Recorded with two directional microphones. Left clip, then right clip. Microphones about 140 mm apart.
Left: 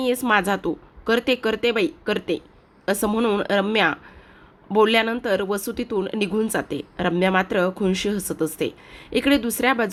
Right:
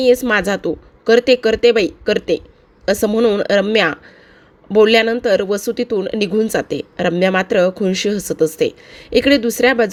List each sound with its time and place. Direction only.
0.0 s speech: 20° right (ahead or behind)